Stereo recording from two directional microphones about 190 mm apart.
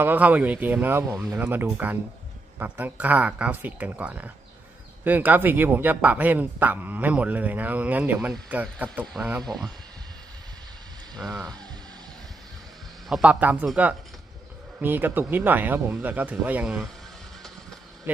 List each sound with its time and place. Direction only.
0.0 s speech: 10° right (ahead or behind)
11.2 s speech: 5° left (ahead or behind)
13.1 s speech: 5° right (ahead or behind)